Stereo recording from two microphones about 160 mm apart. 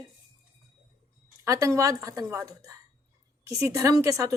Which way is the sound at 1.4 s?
20° right (ahead or behind).